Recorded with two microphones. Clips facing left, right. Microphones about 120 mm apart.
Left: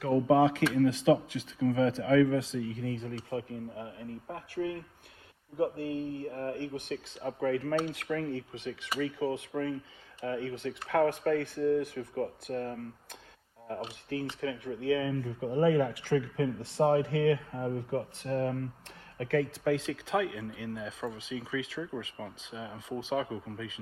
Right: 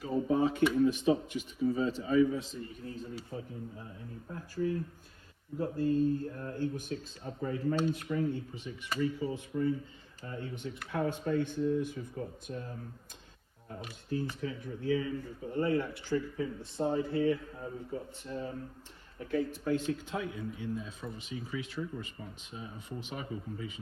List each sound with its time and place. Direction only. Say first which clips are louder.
0.0 s speech: left 5 dB; 80° left
10.2 s speech: left 7 dB; 85° left
10.8 s speech: left 6 dB; 70° left (ahead or behind)
14.1 s speech: left 1 dB; 75° left (ahead or behind)
19.2 s speech: left 4 dB; 85° left